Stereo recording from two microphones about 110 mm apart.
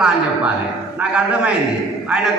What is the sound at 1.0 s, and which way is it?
Speech, 10° right (ahead or behind).